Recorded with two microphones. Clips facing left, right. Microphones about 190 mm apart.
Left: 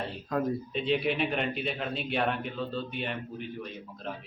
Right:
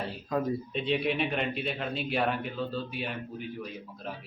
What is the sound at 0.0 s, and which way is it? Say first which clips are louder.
A man's voice: even; centre (ahead or behind).